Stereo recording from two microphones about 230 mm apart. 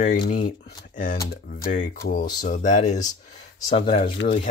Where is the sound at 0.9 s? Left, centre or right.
Left.